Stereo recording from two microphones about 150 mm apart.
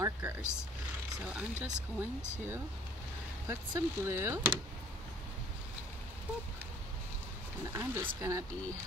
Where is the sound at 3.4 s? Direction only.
15° right (ahead or behind).